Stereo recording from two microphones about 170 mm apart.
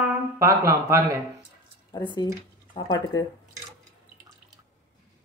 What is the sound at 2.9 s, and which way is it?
Speech, 20° left (ahead or behind).